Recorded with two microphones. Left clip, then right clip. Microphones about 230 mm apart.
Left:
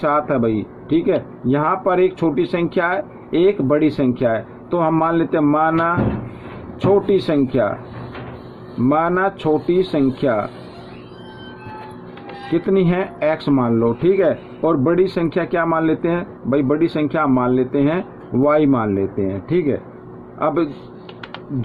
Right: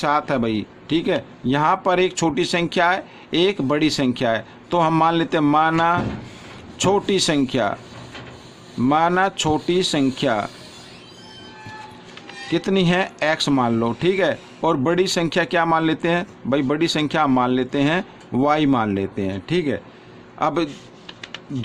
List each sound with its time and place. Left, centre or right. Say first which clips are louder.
0.0 s a man's voice: left 3 dB; right
8.9 s a man's voice: even; right
12.5 s a man's voice: left 2 dB; right